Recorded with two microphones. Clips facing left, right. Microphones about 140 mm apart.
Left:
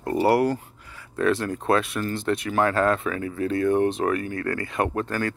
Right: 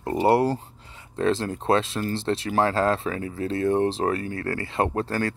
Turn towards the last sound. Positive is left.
turn(degrees=-35)  # may be behind; listen again after turning